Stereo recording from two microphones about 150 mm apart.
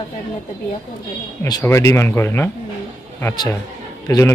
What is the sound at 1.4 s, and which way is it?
Speech, 20° left (ahead or behind).